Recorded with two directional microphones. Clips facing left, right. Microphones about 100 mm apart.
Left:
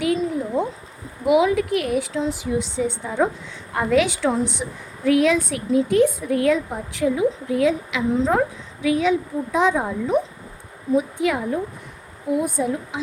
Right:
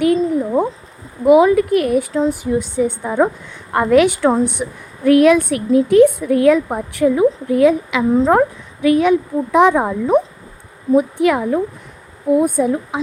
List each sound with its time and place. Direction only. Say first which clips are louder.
0.0 s a sound: right 7 dB; 50° right (ahead or behind)
1.2 s a woman's voice: right 7 dB; 45° right (ahead or behind); by 11.6 s 60° right (ahead or behind)
12.3 s speech: right 7 dB; 50° right (ahead or behind)